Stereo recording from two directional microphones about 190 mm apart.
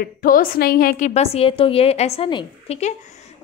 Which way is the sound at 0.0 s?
50° left (ahead or behind).